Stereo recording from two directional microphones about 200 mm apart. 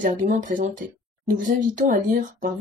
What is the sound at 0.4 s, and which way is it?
Speech, 40° right (ahead or behind).